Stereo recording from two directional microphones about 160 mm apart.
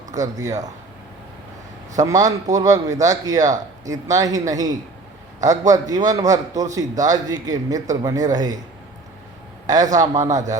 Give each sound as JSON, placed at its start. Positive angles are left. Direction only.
{"t": 0.2, "sound": "a man's voice", "side_deg": -20}
{"t": 2.0, "sound": "a man's voice", "side_deg": -20}
{"t": 9.6, "sound": "a man's voice", "side_deg": -25}